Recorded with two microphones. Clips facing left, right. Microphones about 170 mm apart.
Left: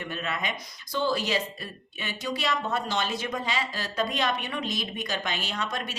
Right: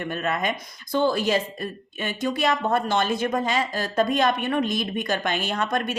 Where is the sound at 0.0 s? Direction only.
50° right (ahead or behind).